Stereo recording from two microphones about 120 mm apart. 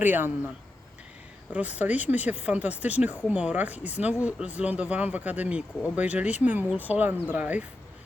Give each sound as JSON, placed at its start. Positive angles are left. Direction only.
{"t": 0.0, "sound": "speech", "side_deg": -15}
{"t": 1.5, "sound": "speech", "side_deg": -10}